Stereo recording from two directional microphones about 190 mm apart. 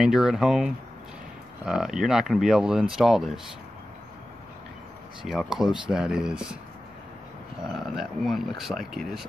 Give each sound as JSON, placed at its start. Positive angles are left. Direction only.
{"t": 0.0, "sound": "speech", "side_deg": -5}
{"t": 5.2, "sound": "speech", "side_deg": 0}
{"t": 7.6, "sound": "speech", "side_deg": 0}